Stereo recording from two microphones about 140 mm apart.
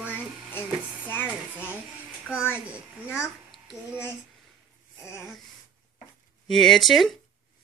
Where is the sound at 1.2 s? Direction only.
10° right (ahead or behind).